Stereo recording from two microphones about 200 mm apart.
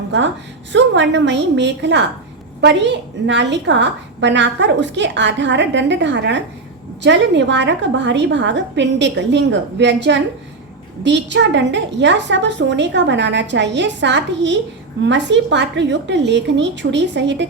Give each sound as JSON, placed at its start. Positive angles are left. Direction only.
{"t": 0.1, "sound": "a woman's voice", "side_deg": -60}